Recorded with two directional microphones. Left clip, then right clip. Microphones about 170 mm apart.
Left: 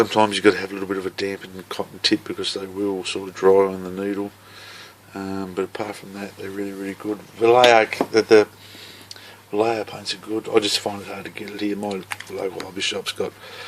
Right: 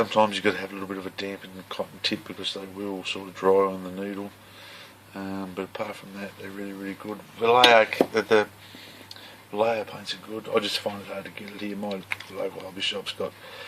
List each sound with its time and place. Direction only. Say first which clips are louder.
0.0 s speech: left 5 dB; 35° left (ahead or behind)
5.2 s speech: left 7 dB; 35° left (ahead or behind)
9.5 s speech: left 3 dB; 40° left (ahead or behind)